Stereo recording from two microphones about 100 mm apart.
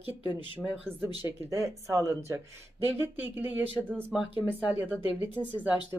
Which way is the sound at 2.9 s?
20° right (ahead or behind).